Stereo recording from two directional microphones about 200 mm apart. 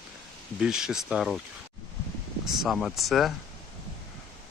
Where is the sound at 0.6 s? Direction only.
5° right (ahead or behind).